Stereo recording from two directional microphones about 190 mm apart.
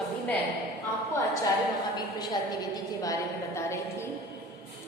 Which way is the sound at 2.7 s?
20° left (ahead or behind).